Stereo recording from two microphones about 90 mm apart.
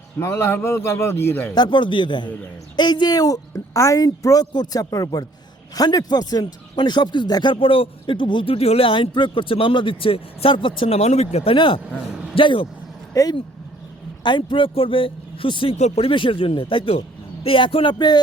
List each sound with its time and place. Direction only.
0.2 s a man's voice: 30° left (ahead or behind)
1.5 s speech: 55° left (ahead or behind)
7.5 s speech: 80° left
14.3 s a man's voice: 70° left (ahead or behind)
17.9 s speech: 50° left (ahead or behind)